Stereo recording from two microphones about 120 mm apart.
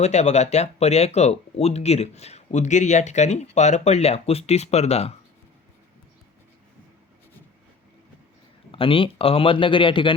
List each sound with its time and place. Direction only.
0.0 s speech: 70° left (ahead or behind)
8.7 s speech: 50° left (ahead or behind)